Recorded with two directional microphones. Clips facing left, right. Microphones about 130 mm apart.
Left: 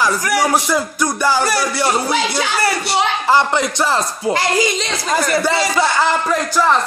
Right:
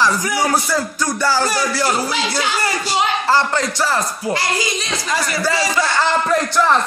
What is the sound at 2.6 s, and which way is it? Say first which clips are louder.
Speech: left 2 dB; 65° left (ahead or behind).